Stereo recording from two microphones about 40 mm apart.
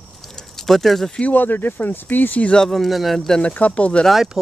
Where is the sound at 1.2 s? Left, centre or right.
Left.